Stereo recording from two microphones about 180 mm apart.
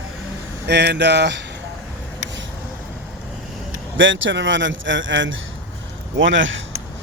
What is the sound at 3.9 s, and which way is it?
A man's voice, 90° right.